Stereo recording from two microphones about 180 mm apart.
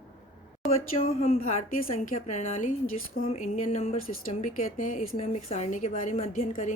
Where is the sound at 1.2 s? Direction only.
40° left (ahead or behind).